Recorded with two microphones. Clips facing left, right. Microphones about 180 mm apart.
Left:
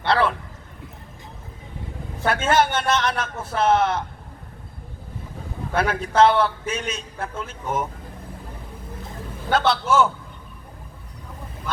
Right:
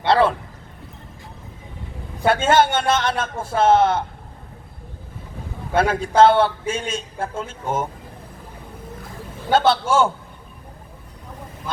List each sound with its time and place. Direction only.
0.0 s a sound: 25° right (ahead or behind)
2.2 s a man's voice: 25° right (ahead or behind)
5.7 s a man's voice: 30° right (ahead or behind)
9.5 s a man's voice: 25° right (ahead or behind)